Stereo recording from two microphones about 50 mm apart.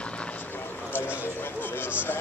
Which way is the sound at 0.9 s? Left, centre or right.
Left.